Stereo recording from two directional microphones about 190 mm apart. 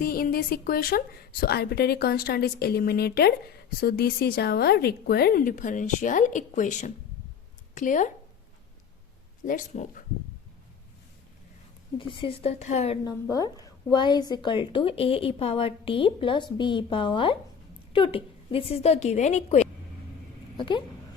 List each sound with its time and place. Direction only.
0.0 s a woman's voice: 50° left (ahead or behind)
9.4 s a woman's voice: 45° left (ahead or behind)
11.9 s a woman's voice: 25° left (ahead or behind)
13.3 s a woman's voice: 20° left (ahead or behind); by 19.6 s 35° left (ahead or behind)
20.6 s a woman's voice: 25° left (ahead or behind)